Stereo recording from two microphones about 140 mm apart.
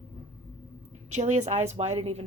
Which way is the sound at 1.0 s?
60° right (ahead or behind).